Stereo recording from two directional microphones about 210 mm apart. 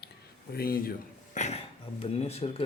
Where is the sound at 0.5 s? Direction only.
45° left (ahead or behind).